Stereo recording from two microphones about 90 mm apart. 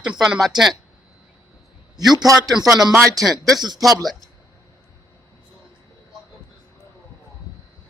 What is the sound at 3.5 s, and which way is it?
Speech, 50° right (ahead or behind).